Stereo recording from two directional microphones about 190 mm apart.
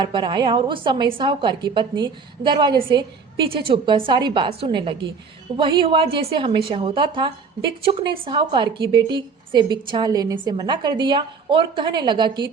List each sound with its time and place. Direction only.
0.0 s a woman's voice: 25° right (ahead or behind)